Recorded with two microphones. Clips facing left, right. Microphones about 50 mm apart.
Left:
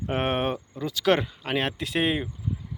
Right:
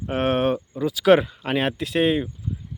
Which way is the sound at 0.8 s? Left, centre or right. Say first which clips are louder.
Right 6 dB; centre.